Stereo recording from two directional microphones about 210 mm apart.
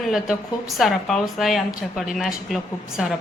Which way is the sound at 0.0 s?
Centre (ahead or behind).